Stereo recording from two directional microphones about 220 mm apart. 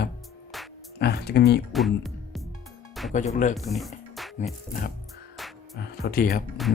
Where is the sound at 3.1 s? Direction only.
35° left (ahead or behind).